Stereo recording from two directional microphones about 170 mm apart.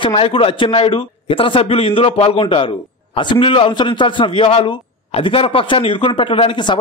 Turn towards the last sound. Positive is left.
turn(degrees=30)  # may be behind; listen again after turning